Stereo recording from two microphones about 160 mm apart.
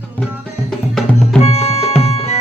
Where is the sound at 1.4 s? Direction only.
40° left (ahead or behind).